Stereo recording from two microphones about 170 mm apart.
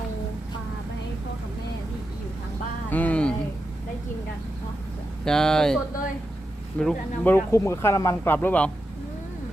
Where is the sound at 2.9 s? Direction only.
10° left (ahead or behind).